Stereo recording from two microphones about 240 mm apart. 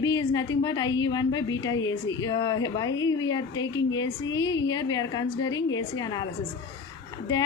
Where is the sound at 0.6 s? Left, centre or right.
Centre.